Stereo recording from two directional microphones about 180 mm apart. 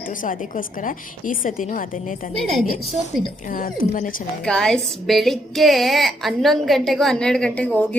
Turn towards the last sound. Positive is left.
turn(degrees=5)  # may be behind; listen again after turning